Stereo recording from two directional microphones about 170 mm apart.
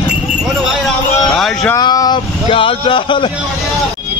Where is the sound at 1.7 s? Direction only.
25° left (ahead or behind).